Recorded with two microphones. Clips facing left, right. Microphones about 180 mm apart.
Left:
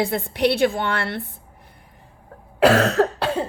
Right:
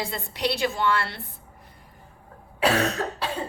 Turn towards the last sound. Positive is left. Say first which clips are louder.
# left 8 dB
turn(degrees=65)  # may be behind; listen again after turning